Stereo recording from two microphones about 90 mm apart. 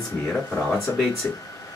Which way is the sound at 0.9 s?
35° left (ahead or behind).